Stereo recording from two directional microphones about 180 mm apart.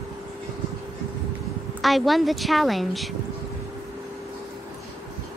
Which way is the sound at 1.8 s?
Centre (ahead or behind).